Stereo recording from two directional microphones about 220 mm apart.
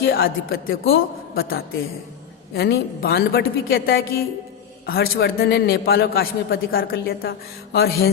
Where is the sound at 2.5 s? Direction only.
45° left (ahead or behind).